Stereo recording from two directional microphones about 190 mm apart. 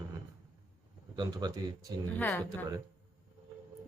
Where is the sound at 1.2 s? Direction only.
20° right (ahead or behind).